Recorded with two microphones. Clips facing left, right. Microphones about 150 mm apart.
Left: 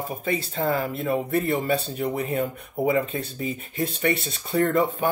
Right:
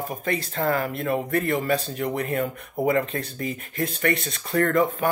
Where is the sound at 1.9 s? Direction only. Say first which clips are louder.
Even; 5° left (ahead or behind).